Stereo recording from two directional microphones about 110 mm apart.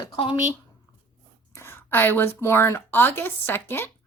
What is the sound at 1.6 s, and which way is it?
Speech, 20° left (ahead or behind).